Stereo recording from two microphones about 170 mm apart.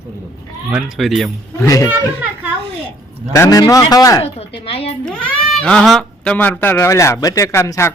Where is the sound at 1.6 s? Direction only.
20° left (ahead or behind).